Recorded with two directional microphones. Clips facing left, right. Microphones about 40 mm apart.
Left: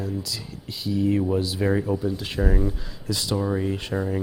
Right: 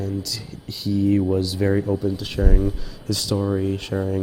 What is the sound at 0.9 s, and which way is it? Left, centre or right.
Speech, centre.